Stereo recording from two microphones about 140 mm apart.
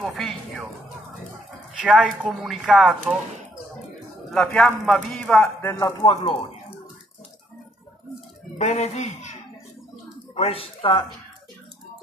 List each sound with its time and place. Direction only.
0.0 s music: centre (ahead or behind)
1.8 s speech: 5° right (ahead or behind)
4.3 s speech: 5° left (ahead or behind)
5.6 s speech: 20° left (ahead or behind)
5.9 s speech: 40° left (ahead or behind)
8.5 s speech: 55° left (ahead or behind)
10.3 s speech: 45° left (ahead or behind)